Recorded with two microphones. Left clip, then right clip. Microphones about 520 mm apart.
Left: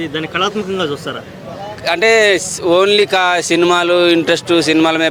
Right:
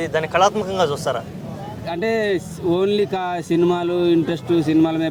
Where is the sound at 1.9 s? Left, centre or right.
Left.